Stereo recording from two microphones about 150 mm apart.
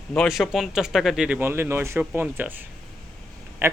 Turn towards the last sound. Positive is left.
turn(degrees=-15)  # may be behind; listen again after turning